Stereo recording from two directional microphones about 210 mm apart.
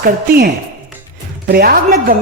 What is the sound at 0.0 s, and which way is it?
Speech, 45° right (ahead or behind).